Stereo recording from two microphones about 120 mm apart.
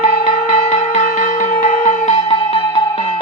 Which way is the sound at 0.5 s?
70° left (ahead or behind).